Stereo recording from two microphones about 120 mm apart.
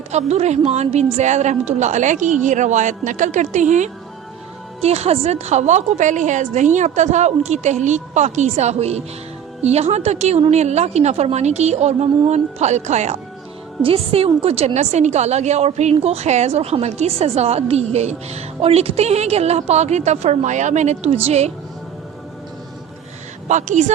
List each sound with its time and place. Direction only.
0.1 s a woman's voice: 65° right (ahead or behind); by 3.8 s 90° right
4.8 s a woman's voice: 60° right (ahead or behind)
13.8 s a woman's voice: 55° right (ahead or behind)
23.5 s a woman's voice: 90° right